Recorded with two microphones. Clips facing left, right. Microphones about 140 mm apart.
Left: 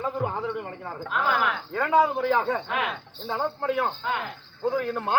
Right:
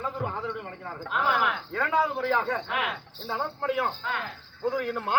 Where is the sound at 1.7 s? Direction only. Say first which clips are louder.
Left 6 dB; centre (ahead or behind).